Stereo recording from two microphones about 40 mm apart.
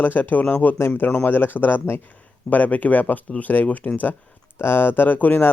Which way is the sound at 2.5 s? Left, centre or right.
Left.